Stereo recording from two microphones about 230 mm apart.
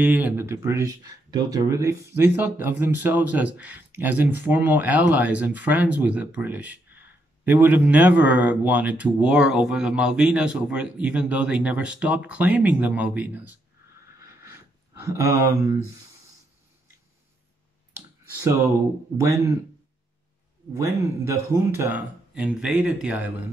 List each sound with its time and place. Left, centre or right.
0.0 s speech: centre
14.4 s a sound: centre
20.7 s speech: centre